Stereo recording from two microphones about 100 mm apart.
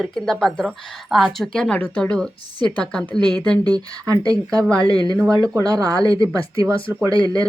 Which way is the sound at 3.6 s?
40° right (ahead or behind).